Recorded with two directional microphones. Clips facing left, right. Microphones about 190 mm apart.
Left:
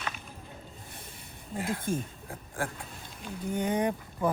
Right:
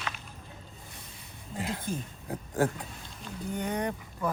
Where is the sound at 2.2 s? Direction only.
20° right (ahead or behind).